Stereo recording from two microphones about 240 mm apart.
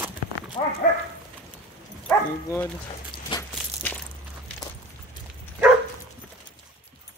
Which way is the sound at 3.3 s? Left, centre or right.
Centre.